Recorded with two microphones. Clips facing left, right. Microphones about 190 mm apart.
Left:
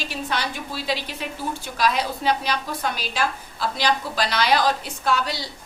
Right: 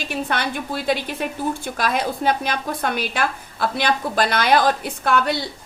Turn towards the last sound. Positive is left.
turn(degrees=-55)  # may be behind; listen again after turning